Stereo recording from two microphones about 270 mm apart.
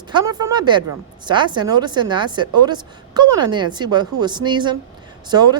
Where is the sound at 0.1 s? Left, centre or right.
Centre.